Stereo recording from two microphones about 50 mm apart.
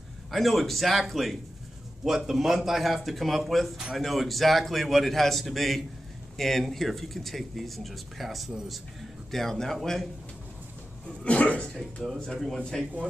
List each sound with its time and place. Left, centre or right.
0.3 s speech: centre
11.2 s speech: left
12.3 s speech: centre